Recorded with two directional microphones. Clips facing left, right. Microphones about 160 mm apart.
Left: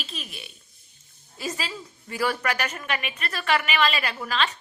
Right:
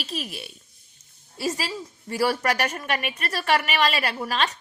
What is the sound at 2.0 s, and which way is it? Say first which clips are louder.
A woman's voice: right 3 dB; 40° right (ahead or behind).